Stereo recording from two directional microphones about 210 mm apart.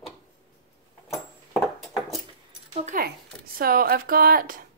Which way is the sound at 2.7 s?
35° right (ahead or behind).